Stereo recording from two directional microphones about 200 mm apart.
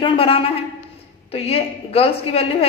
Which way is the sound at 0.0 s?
25° left (ahead or behind).